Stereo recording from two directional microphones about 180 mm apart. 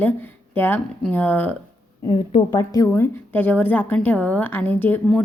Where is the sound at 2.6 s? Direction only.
15° left (ahead or behind).